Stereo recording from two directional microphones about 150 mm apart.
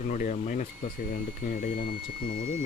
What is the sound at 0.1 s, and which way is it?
Speech, 60° left (ahead or behind).